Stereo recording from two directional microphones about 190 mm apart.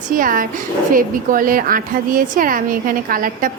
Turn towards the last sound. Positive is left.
turn(degrees=-50)  # may be behind; listen again after turning